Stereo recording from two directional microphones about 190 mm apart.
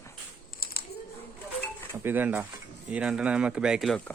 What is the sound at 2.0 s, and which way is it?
Speech, 10° right (ahead or behind).